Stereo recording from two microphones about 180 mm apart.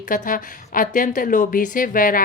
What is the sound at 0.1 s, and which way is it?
Speech, 50° left (ahead or behind).